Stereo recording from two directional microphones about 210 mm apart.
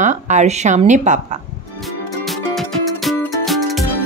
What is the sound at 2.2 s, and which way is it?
Music, centre (ahead or behind).